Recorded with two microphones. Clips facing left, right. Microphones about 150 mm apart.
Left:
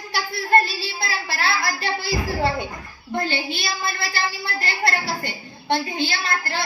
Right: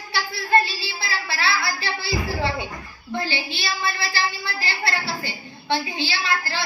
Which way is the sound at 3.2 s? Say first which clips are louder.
Left 3 dB; 45° left (ahead or behind).